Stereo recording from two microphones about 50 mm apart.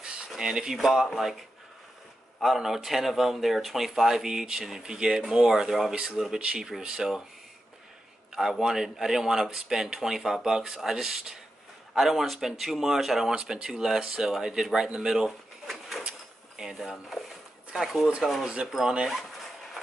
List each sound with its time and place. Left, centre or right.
0.0 s a sound: right
0.4 s speech: centre
0.7 s speech: centre
2.4 s speech: centre
6.3 s speech: centre
8.4 s speech: centre
18.4 s speech: centre